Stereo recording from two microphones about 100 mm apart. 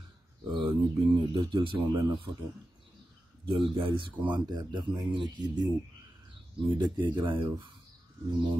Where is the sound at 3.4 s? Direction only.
65° right (ahead or behind).